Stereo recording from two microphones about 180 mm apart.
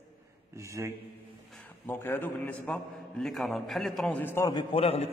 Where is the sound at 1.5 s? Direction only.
10° left (ahead or behind).